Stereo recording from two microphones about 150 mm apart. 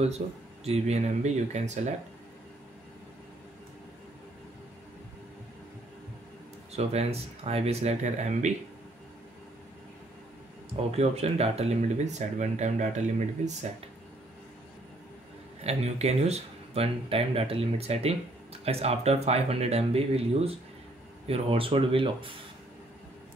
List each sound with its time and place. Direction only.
0.2 s speech: 45° right (ahead or behind)
6.7 s speech: 45° right (ahead or behind)
10.8 s speech: 45° right (ahead or behind)
15.6 s speech: 45° right (ahead or behind)